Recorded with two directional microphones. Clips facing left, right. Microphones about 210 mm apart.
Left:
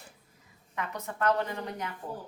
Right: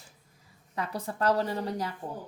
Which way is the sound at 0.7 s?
35° right (ahead or behind).